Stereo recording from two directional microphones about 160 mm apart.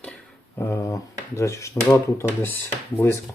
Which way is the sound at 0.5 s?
15° left (ahead or behind).